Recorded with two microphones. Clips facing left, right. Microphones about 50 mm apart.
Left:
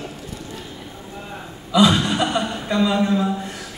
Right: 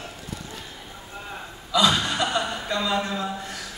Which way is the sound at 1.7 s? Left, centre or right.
Centre.